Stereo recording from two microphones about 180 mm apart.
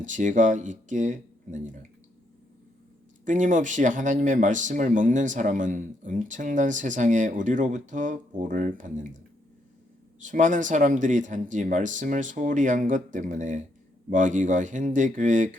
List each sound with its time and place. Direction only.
0.0 s speech: 45° right (ahead or behind)
3.2 s speech: 45° right (ahead or behind)
10.2 s speech: 45° right (ahead or behind)